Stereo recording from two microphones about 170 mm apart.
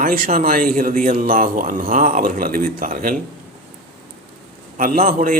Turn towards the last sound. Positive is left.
turn(degrees=-55)  # may be behind; listen again after turning